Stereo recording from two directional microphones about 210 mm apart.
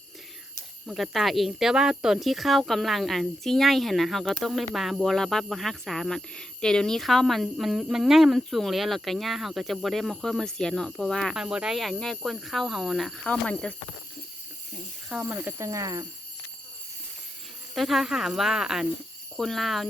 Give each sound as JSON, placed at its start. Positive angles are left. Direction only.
{"t": 0.9, "sound": "speech", "side_deg": 0}
{"t": 15.1, "sound": "speech", "side_deg": -5}
{"t": 17.7, "sound": "speech", "side_deg": 0}